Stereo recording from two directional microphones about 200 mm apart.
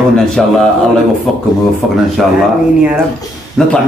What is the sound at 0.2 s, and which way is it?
Speech, centre (ahead or behind).